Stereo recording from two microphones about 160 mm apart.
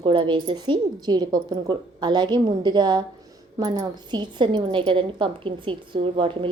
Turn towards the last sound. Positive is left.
turn(degrees=-35)  # may be behind; listen again after turning